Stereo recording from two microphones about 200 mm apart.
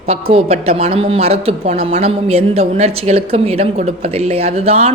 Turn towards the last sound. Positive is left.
turn(degrees=-30)  # may be behind; listen again after turning